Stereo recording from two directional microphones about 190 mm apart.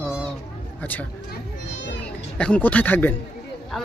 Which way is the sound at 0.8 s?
10° left (ahead or behind).